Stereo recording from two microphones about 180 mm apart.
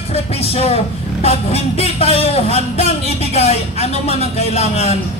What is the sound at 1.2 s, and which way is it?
Speech, 35° left (ahead or behind).